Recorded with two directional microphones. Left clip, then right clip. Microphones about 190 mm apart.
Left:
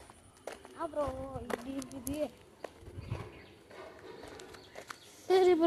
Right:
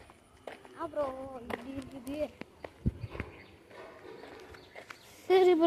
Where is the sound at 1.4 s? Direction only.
75° left (ahead or behind).